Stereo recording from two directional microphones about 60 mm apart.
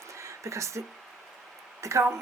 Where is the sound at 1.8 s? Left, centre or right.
Right.